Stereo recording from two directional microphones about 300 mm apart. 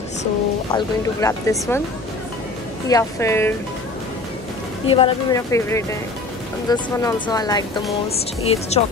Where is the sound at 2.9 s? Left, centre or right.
Centre.